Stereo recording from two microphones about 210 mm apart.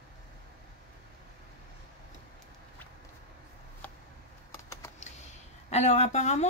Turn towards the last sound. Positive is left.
turn(degrees=35)  # may be behind; listen again after turning